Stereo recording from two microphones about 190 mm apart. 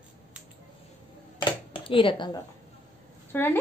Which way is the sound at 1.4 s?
25° left (ahead or behind).